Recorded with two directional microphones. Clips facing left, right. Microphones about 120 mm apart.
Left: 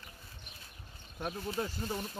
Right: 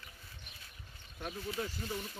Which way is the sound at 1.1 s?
45° left (ahead or behind).